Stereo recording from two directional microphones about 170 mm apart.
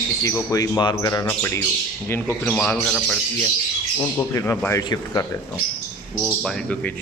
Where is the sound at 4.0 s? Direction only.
15° left (ahead or behind).